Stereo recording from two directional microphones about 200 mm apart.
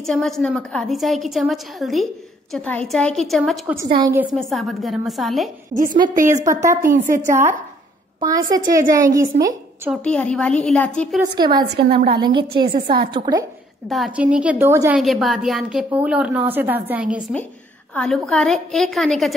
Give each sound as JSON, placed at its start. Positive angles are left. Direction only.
{"t": 0.0, "sound": "a woman's voice", "side_deg": 0}
{"t": 6.0, "sound": "a woman's voice", "side_deg": -40}
{"t": 6.4, "sound": "a woman's voice", "side_deg": -15}
{"t": 6.9, "sound": "a woman's voice", "side_deg": -40}
{"t": 8.2, "sound": "a woman's voice", "side_deg": -20}
{"t": 10.0, "sound": "a woman's voice", "side_deg": 5}
{"t": 11.3, "sound": "a woman's voice", "side_deg": -20}
{"t": 11.6, "sound": "a woman's voice", "side_deg": -55}
{"t": 12.1, "sound": "a woman's voice", "side_deg": -25}
{"t": 13.8, "sound": "a woman's voice", "side_deg": 0}
{"t": 15.0, "sound": "a woman's voice", "side_deg": 0}
{"t": 17.9, "sound": "a woman's voice", "side_deg": 5}